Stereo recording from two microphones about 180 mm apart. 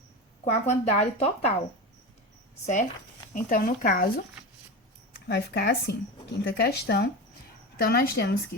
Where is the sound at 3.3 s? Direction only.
50° left (ahead or behind).